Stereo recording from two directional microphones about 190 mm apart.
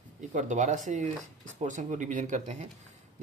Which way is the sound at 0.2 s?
40° right (ahead or behind).